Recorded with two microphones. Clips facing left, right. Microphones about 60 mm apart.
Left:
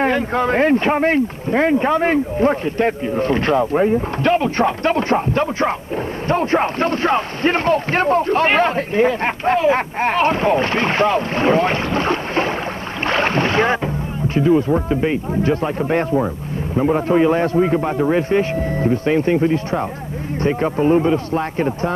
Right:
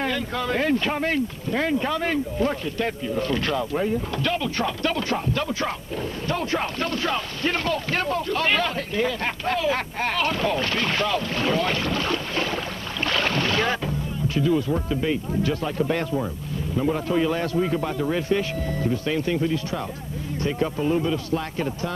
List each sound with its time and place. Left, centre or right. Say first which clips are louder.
0.0 s a man's voice: left 9 dB; left
13.0 s boat: left 6 dB; left
14.2 s a man's voice: left 7 dB; left